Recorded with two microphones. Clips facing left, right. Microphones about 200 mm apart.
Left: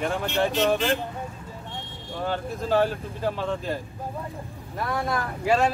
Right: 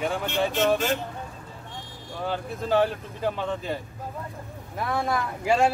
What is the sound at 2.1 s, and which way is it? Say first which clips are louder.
Speech: left 1 dB; centre (ahead or behind).